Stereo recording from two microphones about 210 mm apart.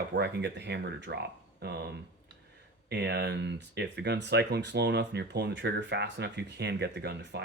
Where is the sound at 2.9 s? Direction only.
50° right (ahead or behind).